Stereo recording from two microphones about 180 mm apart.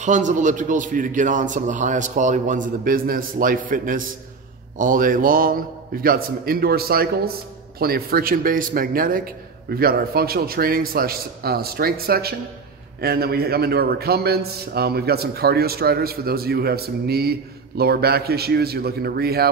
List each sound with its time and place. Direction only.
0.0 s a man's voice: 40° right (ahead or behind); by 19.5 s 60° right (ahead or behind)